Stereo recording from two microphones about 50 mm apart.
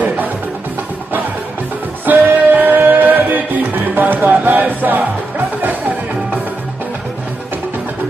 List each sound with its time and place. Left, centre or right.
0.0 s music: right
2.0 s music: right